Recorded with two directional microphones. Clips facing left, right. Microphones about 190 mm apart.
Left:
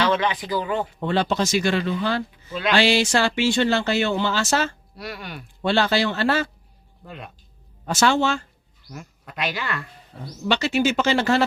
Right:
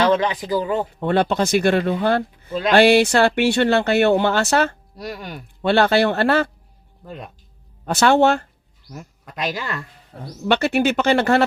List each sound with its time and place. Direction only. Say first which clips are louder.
0.0 s speech: right 4 dB; 40° right (ahead or behind)
1.0 s speech: right 4 dB; 55° right (ahead or behind)
2.5 s speech: right 4 dB; 40° right (ahead or behind)
2.7 s speech: right 6 dB; 55° right (ahead or behind)
4.9 s speech: right 4 dB; 40° right (ahead or behind)
5.6 s speech: right 5 dB; 55° right (ahead or behind)
7.9 s speech: right 5 dB; 60° right (ahead or behind)
9.0 s speech: right 2 dB; 40° right (ahead or behind)
10.1 s speech: right 4 dB; 55° right (ahead or behind)